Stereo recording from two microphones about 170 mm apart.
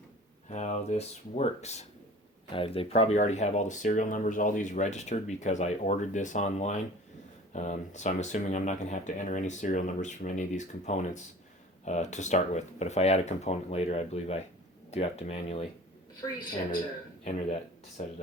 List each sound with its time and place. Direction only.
0.5 s speech: 45° left (ahead or behind)
17.2 s speech: 40° left (ahead or behind)